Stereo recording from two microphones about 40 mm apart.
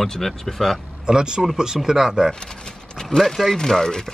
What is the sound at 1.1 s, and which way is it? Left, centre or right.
Speech, centre.